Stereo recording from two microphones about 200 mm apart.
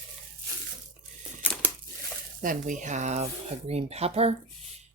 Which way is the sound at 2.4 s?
40° right (ahead or behind).